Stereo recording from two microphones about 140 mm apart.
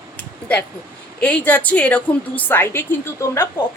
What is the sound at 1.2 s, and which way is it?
A woman's voice, 10° left (ahead or behind).